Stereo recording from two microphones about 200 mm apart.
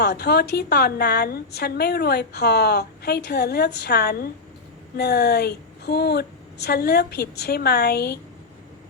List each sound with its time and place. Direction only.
0.0 s a woman's voice: 55° left (ahead or behind)